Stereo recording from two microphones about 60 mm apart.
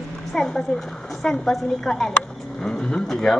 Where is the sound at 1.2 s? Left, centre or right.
Centre.